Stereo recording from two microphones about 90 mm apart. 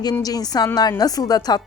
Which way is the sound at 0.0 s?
45° left (ahead or behind).